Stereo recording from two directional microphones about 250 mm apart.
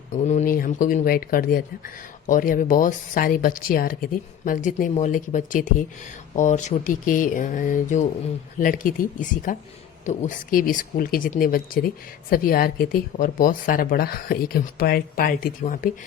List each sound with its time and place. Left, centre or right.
0.1 s speech: left